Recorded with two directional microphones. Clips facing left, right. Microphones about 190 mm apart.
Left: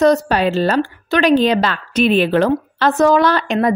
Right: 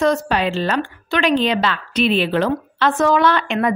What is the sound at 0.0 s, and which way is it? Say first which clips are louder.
A woman's voice: left 4 dB; 40° left (ahead or behind).